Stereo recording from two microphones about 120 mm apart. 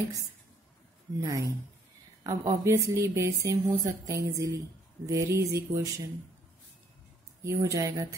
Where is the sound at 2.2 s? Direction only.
30° right (ahead or behind).